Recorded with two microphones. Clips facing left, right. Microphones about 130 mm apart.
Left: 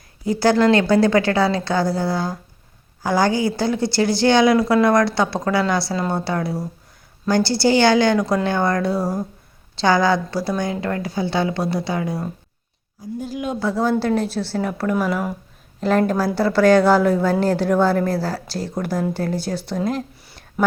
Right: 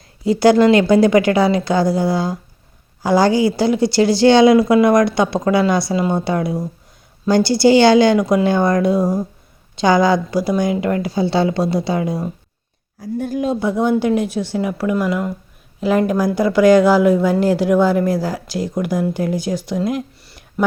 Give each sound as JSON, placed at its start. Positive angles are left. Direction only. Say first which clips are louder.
{"t": 0.3, "sound": "a woman's voice", "louder": "right 4 dB", "side_deg": -20}
{"t": 13.6, "sound": "a woman's voice", "louder": "right 1 dB", "side_deg": -20}
{"t": 15.8, "sound": "a woman's voice", "louder": "right 2 dB", "side_deg": -10}